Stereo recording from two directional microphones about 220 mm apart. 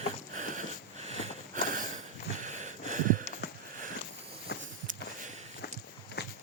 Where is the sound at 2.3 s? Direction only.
35° right (ahead or behind).